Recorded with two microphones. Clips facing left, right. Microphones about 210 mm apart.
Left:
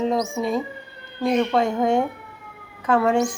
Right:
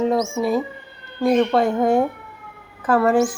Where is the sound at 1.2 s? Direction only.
5° right (ahead or behind).